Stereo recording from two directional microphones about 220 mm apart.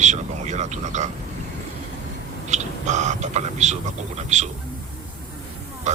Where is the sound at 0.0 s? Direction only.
30° right (ahead or behind).